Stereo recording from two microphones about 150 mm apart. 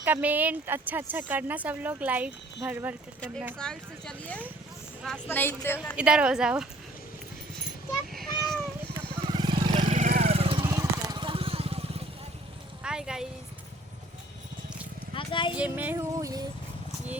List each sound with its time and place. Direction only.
0.0 s a woman's voice: 10° right (ahead or behind)
3.6 s a woman's voice: 5° left (ahead or behind)
6.0 s a woman's voice: 5° right (ahead or behind)
8.1 s a sound: centre (ahead or behind)
9.2 s vehicle: 30° right (ahead or behind)
9.9 s vehicle: 55° right (ahead or behind); by 10.7 s 35° right (ahead or behind)
10.7 s vehicle: 25° right (ahead or behind); by 12.0 s 40° right (ahead or behind)
12.8 s a sound: 5° right (ahead or behind)
15.1 s speech: 35° left (ahead or behind)
15.5 s a woman's voice: 10° right (ahead or behind)